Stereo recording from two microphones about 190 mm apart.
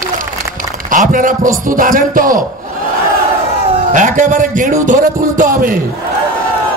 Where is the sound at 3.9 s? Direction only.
45° right (ahead or behind).